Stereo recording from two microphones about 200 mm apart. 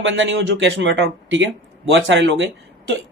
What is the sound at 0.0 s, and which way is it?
A woman's voice, 65° right (ahead or behind).